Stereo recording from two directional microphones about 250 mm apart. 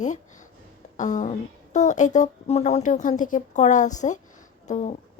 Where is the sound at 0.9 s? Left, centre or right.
Left.